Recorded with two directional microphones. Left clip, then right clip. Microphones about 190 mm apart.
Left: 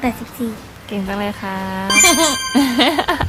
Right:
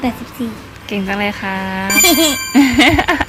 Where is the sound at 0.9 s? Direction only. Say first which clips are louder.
Right 4 dB; centre (ahead or behind).